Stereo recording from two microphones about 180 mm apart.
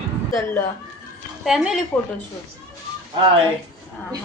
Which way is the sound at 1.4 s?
Centre (ahead or behind).